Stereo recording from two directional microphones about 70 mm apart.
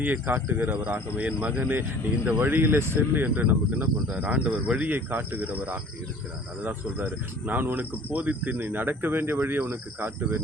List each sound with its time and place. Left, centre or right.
0.0 s speech: right
4.9 s speech: right